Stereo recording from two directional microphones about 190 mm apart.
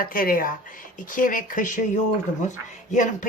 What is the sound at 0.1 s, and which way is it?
Speech, 45° left (ahead or behind).